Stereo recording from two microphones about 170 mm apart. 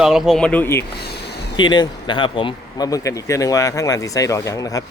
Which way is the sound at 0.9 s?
70° left (ahead or behind).